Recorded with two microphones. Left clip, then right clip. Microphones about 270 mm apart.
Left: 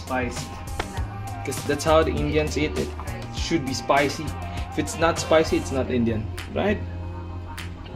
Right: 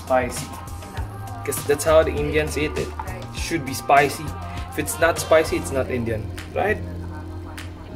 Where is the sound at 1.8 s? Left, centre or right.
Centre.